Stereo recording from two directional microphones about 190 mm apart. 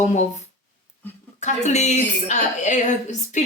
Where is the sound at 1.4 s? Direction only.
40° left (ahead or behind).